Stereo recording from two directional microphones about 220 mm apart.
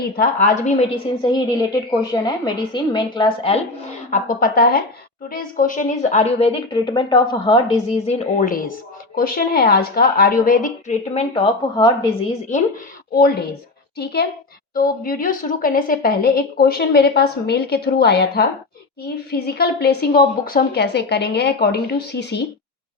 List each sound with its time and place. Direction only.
0.0 s a woman's voice: 40° left (ahead or behind)
1.2 s a woman's voice: 20° left (ahead or behind)
4.1 s a woman's voice: 40° left (ahead or behind)
13.1 s a woman's voice: 45° left (ahead or behind)